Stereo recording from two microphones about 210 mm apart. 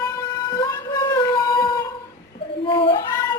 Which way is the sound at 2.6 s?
25° left (ahead or behind).